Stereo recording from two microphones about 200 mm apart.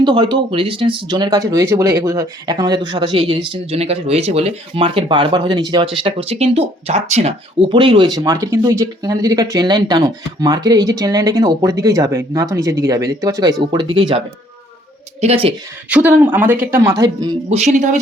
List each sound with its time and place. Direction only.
0.0 s speech: 25° right (ahead or behind)
15.2 s speech: 30° right (ahead or behind)
15.9 s speech: 10° right (ahead or behind)
17.5 s speech: 35° right (ahead or behind)